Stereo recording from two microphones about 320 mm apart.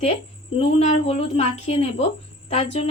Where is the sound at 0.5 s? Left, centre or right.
Centre.